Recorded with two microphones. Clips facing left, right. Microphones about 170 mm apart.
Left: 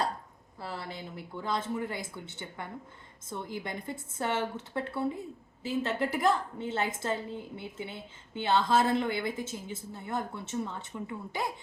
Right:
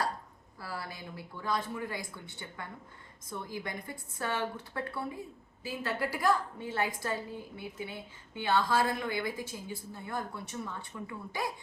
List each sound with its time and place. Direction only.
0.6 s a woman's voice: 25° left (ahead or behind)